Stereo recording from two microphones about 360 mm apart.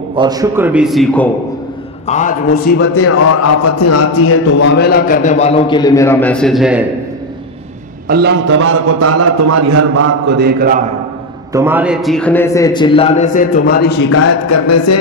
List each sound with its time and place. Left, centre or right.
0.1 s a man's voice: centre
2.0 s a man's voice: left
2.9 s a man's voice: left; by 6.8 s centre
8.1 s a man's voice: right
11.5 s a man's voice: centre; by 13.8 s left
13.9 s speech: left